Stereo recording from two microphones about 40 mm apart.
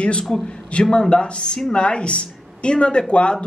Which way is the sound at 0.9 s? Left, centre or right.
Left.